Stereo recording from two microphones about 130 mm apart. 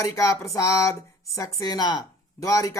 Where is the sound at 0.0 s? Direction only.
25° left (ahead or behind).